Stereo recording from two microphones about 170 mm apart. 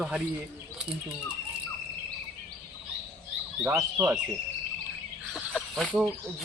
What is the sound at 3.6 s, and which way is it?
Speech, 15° right (ahead or behind).